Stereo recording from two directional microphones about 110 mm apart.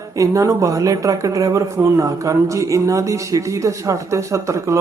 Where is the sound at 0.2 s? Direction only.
30° right (ahead or behind).